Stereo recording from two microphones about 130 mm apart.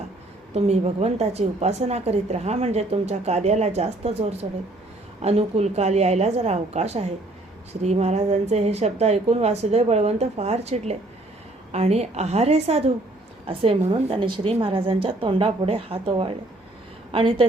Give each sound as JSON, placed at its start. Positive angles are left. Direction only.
{"t": 0.5, "sound": "a woman's voice", "side_deg": -55}